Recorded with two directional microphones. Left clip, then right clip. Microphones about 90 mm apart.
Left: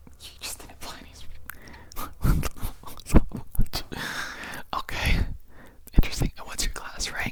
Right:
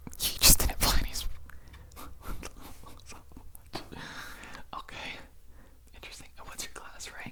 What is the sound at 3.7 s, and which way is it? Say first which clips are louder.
Whispering: left 9 dB; 40° left (ahead or behind).